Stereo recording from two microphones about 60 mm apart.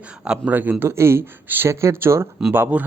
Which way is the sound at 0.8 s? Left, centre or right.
Right.